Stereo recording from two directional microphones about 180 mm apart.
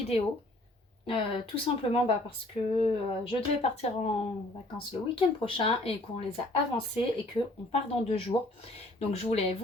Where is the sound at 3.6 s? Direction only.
35° left (ahead or behind).